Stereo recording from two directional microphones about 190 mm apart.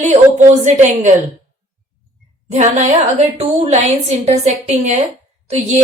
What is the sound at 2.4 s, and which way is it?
A woman's voice, 35° right (ahead or behind).